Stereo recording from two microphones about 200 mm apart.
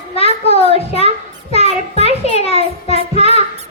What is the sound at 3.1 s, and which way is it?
Music, 30° left (ahead or behind).